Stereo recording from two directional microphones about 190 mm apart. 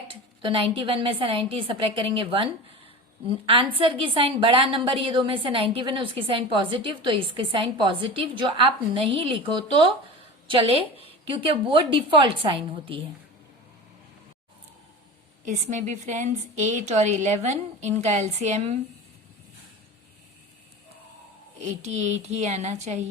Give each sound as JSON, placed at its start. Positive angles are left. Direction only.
{"t": 0.1, "sound": "a woman's voice", "side_deg": -25}
{"t": 15.4, "sound": "a woman's voice", "side_deg": -40}
{"t": 21.8, "sound": "a woman's voice", "side_deg": -35}